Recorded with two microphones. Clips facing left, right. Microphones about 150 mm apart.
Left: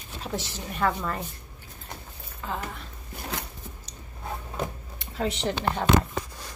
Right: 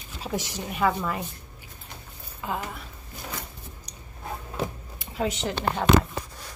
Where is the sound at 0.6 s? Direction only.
5° right (ahead or behind).